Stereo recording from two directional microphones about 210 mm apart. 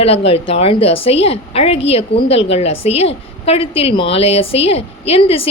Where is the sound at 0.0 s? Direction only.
30° left (ahead or behind).